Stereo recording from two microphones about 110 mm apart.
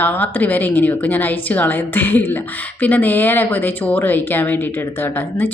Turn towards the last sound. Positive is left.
turn(degrees=20)  # may be behind; listen again after turning